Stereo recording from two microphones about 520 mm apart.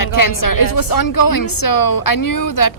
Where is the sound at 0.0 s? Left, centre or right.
Left.